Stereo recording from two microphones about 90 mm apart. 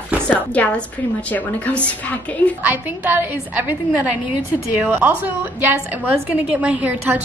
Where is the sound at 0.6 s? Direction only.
15° left (ahead or behind).